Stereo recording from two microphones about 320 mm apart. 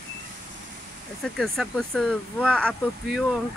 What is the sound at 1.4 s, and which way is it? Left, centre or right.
Speech, centre.